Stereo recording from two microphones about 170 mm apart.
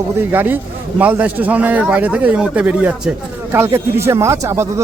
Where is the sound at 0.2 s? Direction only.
10° right (ahead or behind).